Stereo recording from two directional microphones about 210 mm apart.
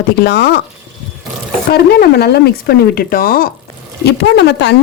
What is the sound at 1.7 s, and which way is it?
Speech, 50° left (ahead or behind).